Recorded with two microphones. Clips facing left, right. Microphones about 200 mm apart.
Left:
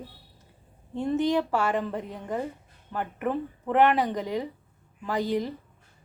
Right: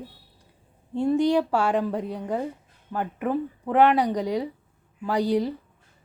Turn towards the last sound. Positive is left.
turn(degrees=-15)  # may be behind; listen again after turning